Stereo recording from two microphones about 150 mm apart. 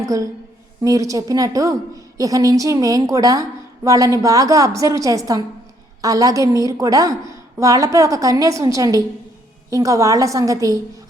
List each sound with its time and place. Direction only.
0.0 s a woman's voice: 20° right (ahead or behind)